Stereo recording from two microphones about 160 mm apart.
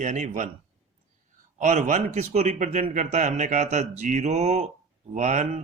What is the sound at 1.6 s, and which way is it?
A man's voice, 50° right (ahead or behind).